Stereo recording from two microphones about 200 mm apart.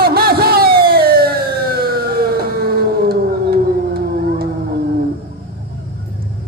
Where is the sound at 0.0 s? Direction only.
50° right (ahead or behind).